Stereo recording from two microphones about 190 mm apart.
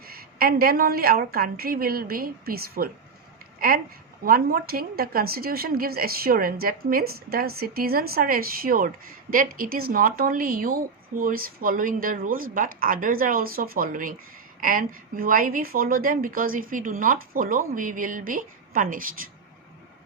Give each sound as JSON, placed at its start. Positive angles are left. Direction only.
{"t": 0.0, "sound": "a woman's voice", "side_deg": -50}
{"t": 4.2, "sound": "a woman's voice", "side_deg": -50}